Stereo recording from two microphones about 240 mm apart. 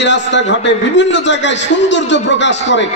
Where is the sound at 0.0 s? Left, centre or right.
Left.